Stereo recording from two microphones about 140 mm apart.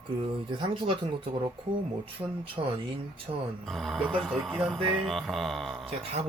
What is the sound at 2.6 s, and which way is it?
Speech, 40° right (ahead or behind).